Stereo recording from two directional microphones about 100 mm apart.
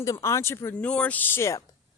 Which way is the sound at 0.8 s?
10° left (ahead or behind).